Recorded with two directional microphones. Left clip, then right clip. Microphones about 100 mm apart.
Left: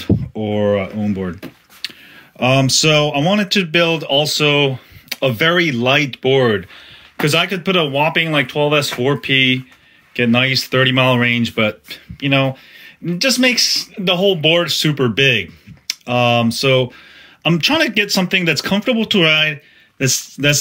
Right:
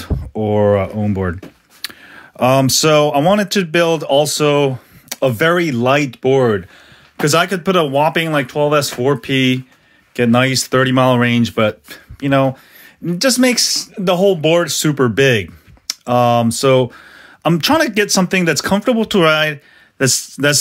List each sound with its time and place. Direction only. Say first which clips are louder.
0.0 s a sound: even; 45° right (ahead or behind)
0.8 s speech: right 3 dB; 90° right
2.1 s speech: right 2 dB; 60° right (ahead or behind); by 4.5 s 40° right (ahead or behind)
4.5 s a sound: right 1 dB; 20° right (ahead or behind)
5.4 s speech: left 1 dB; 30° right (ahead or behind)
10.1 s speech: right 1 dB; 35° right (ahead or behind)
15.0 s speech: right 1 dB; 55° right (ahead or behind); by 18.8 s 35° right (ahead or behind)
18.8 s speech: right 1 dB; 55° right (ahead or behind)
20.1 s speech: even; 75° right (ahead or behind)